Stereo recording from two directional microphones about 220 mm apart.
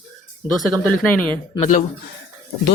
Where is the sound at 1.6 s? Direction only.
35° left (ahead or behind).